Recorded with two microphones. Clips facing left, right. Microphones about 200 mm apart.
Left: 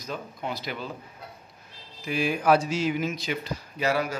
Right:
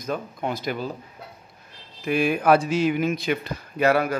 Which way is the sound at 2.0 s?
60° right (ahead or behind).